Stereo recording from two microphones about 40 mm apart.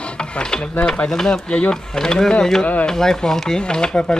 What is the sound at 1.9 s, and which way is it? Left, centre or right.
Speech, centre.